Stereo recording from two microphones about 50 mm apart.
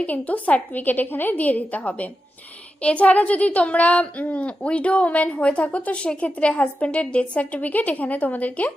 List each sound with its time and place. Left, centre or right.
0.0 s a woman's voice: left